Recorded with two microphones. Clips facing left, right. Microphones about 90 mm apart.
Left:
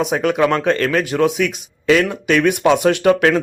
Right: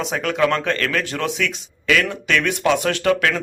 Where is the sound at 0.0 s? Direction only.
20° left (ahead or behind).